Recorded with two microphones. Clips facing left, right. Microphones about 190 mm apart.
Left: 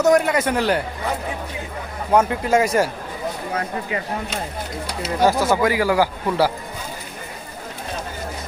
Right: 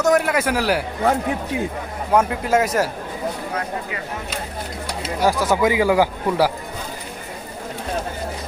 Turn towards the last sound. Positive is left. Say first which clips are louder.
# right 1 dB
turn(degrees=-15)  # may be behind; listen again after turning